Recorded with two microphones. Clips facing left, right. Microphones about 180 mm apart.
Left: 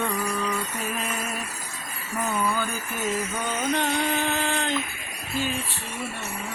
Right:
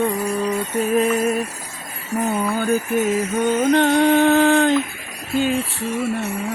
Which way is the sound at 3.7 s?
70° right (ahead or behind).